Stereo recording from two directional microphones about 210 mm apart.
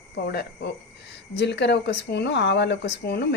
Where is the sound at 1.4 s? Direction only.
55° left (ahead or behind).